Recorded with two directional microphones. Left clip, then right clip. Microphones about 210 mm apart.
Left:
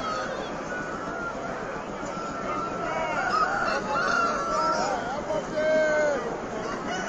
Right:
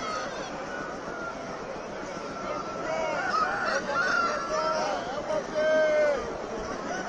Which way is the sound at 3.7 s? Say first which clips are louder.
Left 1 dB; 90° left.